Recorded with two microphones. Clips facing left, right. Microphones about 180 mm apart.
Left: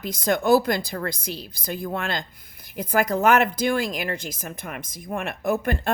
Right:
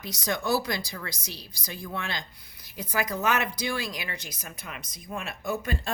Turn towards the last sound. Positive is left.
turn(degrees=60)  # may be behind; listen again after turning